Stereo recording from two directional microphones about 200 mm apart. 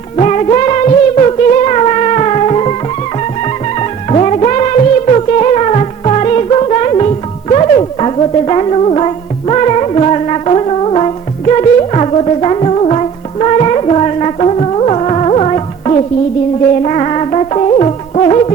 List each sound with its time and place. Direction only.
0.2 s music: 30° left (ahead or behind)
3.8 s music of bollywood: 30° left (ahead or behind)
7.5 s music: 30° left (ahead or behind)